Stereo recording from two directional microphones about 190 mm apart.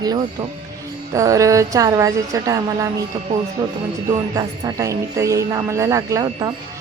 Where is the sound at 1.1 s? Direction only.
15° right (ahead or behind).